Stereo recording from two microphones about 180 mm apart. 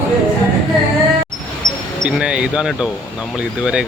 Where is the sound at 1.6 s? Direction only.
20° right (ahead or behind).